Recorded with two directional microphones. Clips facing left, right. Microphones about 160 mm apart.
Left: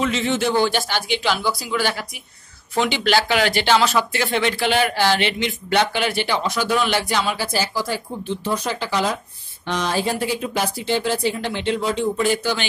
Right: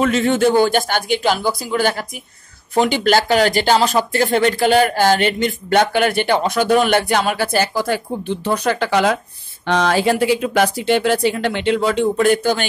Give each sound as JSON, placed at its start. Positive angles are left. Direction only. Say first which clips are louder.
{"t": 0.0, "sound": "speech", "louder": "right 6 dB", "side_deg": -50}
{"t": 9.7, "sound": "speech", "louder": "right 6 dB", "side_deg": -85}